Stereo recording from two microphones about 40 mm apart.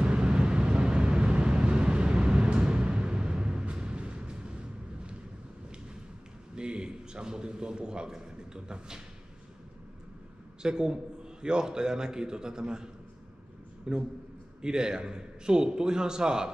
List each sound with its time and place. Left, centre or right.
0.0 s vehicle: right
6.5 s a man's voice: right
10.6 s a man's voice: centre